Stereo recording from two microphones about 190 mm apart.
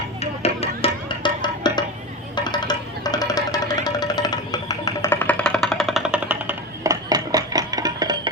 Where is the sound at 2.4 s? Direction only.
20° left (ahead or behind).